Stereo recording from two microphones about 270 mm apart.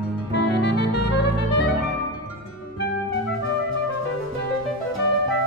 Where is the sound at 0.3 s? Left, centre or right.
Left.